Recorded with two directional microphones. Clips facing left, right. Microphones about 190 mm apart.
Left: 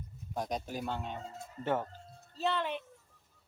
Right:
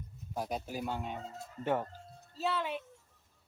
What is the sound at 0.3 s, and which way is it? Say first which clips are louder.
Speech: left 1 dB; 5° right (ahead or behind).